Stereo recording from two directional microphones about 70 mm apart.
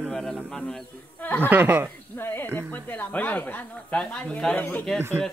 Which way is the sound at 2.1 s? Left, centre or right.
Left.